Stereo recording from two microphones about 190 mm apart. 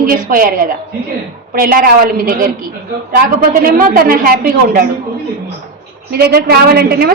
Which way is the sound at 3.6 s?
50° right (ahead or behind).